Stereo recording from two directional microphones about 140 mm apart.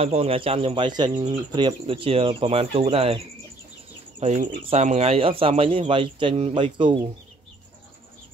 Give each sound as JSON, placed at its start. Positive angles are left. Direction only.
{"t": 0.0, "sound": "speech", "side_deg": -45}
{"t": 4.2, "sound": "speech", "side_deg": -55}